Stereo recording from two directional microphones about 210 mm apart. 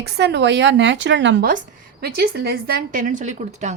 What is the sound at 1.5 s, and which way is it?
A woman's voice, 45° right (ahead or behind).